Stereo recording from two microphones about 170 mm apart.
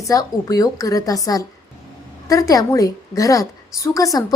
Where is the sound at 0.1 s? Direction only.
20° left (ahead or behind).